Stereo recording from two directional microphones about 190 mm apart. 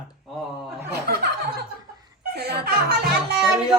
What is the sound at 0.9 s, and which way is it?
Chuckle, 55° right (ahead or behind).